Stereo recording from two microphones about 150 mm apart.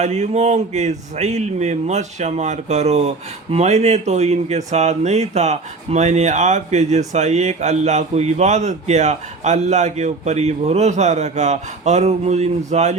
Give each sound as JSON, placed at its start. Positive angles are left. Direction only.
{"t": 0.0, "sound": "a man's voice", "side_deg": -50}